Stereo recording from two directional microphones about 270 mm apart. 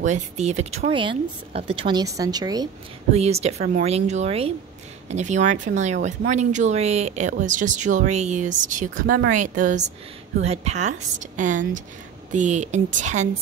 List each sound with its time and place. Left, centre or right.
0.0 s speech: right